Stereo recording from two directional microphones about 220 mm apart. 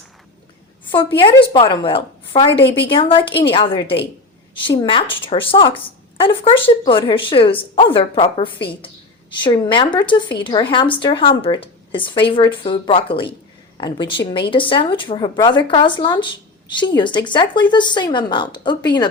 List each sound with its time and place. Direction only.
0.9 s a woman's voice: 20° left (ahead or behind)